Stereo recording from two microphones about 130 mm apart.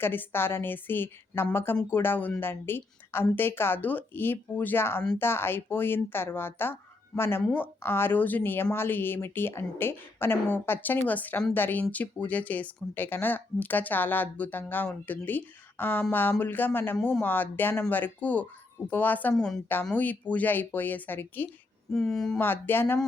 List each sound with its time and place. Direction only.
0.0 s speech: 15° left (ahead or behind)
21.9 s speech: 5° left (ahead or behind)
22.4 s speech: 15° left (ahead or behind)